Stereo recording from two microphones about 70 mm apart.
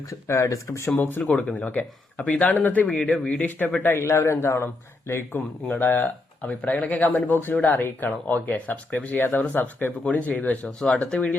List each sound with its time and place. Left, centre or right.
0.1 s speech: left
0.9 s speech: left
1.2 s speech: centre; by 2.8 s left
2.9 s speech: centre
3.8 s speech: left
5.6 s speech: left